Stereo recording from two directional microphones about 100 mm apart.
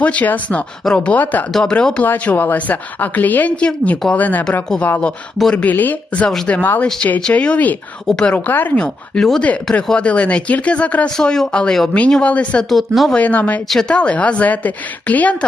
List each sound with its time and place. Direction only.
0.0 s speech: 15° left (ahead or behind)
12.7 s speech: centre (ahead or behind)
13.1 s speech: 15° left (ahead or behind)